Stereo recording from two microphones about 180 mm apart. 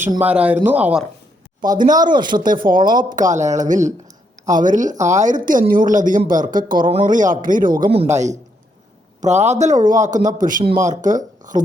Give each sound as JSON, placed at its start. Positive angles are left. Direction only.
{"t": 0.2, "sound": "speech", "side_deg": -10}
{"t": 2.0, "sound": "speech", "side_deg": -25}
{"t": 2.3, "sound": "speech", "side_deg": -50}
{"t": 8.1, "sound": "a man's voice", "side_deg": -40}